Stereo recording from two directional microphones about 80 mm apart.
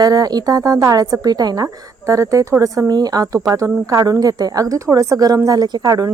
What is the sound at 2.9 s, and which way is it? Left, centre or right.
A woman's voice, right.